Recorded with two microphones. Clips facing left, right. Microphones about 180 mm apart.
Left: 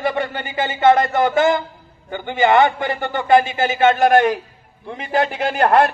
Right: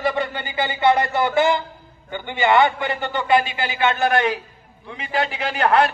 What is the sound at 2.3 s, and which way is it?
A man's voice, 45° left (ahead or behind).